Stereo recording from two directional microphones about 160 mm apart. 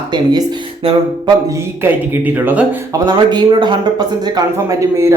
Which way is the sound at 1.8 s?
10° right (ahead or behind).